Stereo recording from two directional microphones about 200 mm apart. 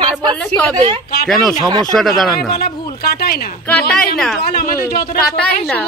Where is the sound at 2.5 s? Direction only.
50° left (ahead or behind).